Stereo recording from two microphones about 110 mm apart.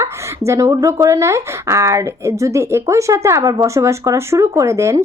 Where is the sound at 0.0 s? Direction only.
25° right (ahead or behind).